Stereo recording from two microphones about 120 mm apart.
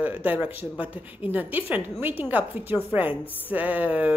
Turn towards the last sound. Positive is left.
turn(degrees=-15)  # may be behind; listen again after turning